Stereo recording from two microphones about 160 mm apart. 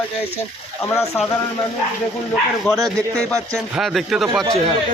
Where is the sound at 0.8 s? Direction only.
15° left (ahead or behind).